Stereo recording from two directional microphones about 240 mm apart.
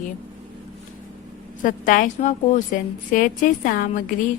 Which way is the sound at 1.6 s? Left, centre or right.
Left.